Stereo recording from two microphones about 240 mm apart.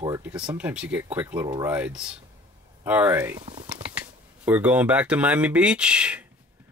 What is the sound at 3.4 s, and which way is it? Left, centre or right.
Speech, right.